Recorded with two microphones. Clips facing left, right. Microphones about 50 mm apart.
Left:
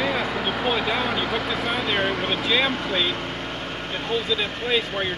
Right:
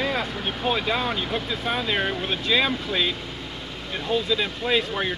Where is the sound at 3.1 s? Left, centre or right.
Left.